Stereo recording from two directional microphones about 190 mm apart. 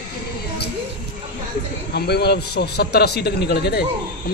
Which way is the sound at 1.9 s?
60° left (ahead or behind).